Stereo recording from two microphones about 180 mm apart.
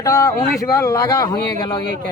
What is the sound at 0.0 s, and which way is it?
Speech, 20° left (ahead or behind).